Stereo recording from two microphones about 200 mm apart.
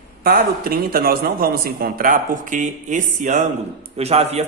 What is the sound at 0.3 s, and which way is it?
A man's voice, 50° right (ahead or behind).